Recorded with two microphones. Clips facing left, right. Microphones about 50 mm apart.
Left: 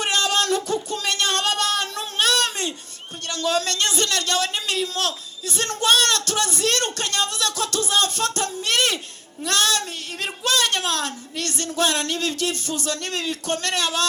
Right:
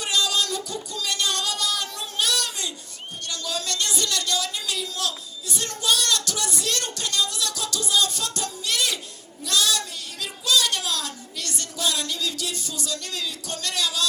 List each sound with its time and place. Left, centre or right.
0.0 s music: left
3.2 s a woman's voice: left